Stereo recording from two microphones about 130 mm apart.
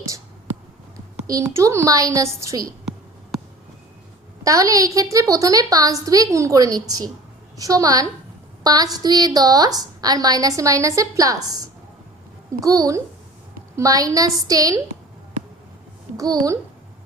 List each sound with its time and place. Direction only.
1.3 s a woman's voice: 25° right (ahead or behind)
4.4 s a woman's voice: 25° right (ahead or behind)
16.1 s a child's voice: 30° right (ahead or behind)